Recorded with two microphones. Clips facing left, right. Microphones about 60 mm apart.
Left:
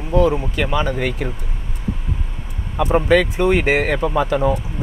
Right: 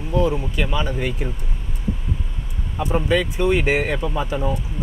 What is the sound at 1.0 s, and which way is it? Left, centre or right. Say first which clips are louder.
Speech: left 3 dB; left.